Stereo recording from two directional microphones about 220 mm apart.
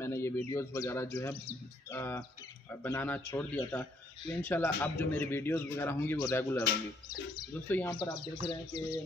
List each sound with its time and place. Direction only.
0.0 s speech: 10° left (ahead or behind)
7.6 s speech: 10° left (ahead or behind)
7.9 s speech: 20° left (ahead or behind)